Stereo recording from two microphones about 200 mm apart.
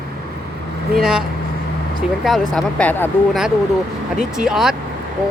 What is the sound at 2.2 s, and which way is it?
Speech, centre (ahead or behind).